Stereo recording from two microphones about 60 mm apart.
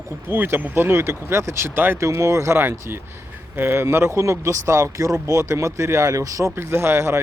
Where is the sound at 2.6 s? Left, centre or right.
Right.